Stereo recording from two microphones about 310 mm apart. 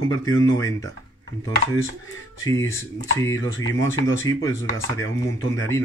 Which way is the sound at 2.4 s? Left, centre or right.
Centre.